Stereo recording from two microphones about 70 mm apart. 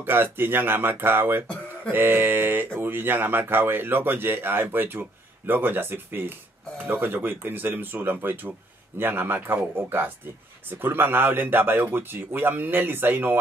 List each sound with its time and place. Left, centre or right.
0.0 s speech: right